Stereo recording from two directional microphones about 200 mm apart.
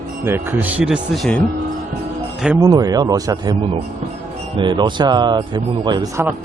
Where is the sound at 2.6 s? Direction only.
20° right (ahead or behind).